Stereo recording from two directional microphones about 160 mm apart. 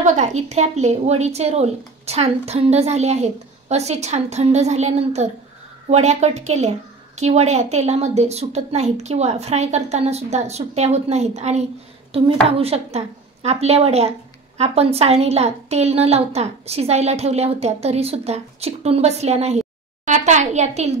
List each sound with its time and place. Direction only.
0.0 s a woman's voice: 50° right (ahead or behind)